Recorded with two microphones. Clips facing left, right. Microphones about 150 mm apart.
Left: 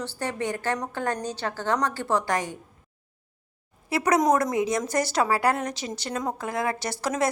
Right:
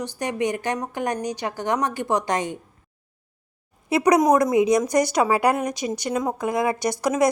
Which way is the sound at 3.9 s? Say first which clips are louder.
Right 4 dB; 20° right (ahead or behind).